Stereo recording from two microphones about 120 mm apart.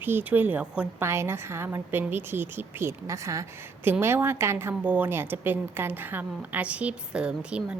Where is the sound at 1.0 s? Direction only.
20° right (ahead or behind).